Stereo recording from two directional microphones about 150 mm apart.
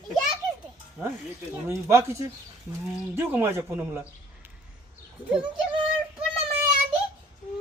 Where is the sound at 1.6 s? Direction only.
20° right (ahead or behind).